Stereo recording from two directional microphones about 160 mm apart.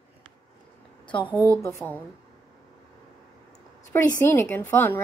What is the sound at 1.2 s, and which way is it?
Speech, 10° right (ahead or behind).